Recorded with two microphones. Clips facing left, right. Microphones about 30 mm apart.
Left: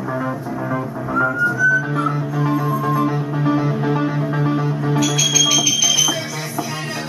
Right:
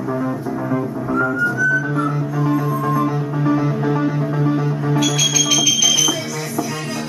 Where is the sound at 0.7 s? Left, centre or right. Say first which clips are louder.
Right 1 dB; centre.